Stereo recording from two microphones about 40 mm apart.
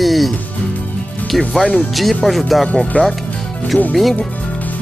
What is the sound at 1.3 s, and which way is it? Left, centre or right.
Speech, centre.